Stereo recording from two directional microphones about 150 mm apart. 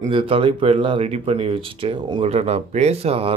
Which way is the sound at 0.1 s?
35° right (ahead or behind).